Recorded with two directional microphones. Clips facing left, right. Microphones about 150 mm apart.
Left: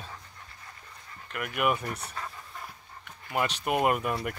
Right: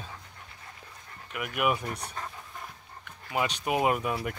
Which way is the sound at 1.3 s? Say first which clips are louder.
Even; centre (ahead or behind).